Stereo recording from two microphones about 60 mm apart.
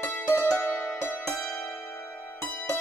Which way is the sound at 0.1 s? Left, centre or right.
Left.